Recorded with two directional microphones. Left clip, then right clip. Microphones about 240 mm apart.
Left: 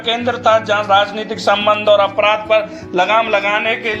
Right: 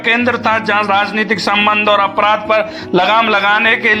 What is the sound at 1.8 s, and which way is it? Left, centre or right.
A man's voice, right.